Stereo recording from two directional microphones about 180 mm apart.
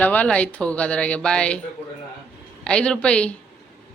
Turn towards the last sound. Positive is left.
turn(degrees=5)  # may be behind; listen again after turning